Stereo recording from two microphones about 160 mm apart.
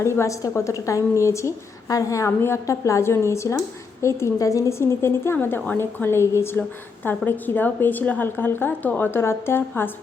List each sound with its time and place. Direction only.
0.0 s a woman's voice: 15° left (ahead or behind)